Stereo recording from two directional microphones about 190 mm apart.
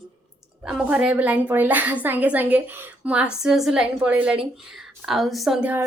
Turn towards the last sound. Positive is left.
turn(degrees=-10)  # may be behind; listen again after turning